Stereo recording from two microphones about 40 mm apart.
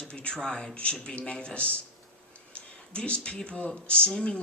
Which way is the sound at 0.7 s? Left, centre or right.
Left.